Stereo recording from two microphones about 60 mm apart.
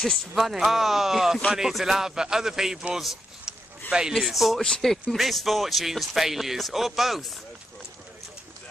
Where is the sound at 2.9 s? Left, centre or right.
Centre.